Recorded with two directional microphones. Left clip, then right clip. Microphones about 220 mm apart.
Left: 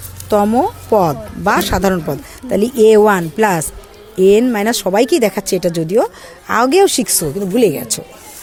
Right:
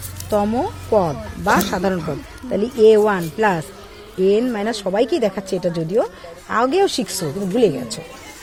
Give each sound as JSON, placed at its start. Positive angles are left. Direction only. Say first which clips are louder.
{"t": 0.3, "sound": "speech", "louder": "left 6 dB", "side_deg": 30}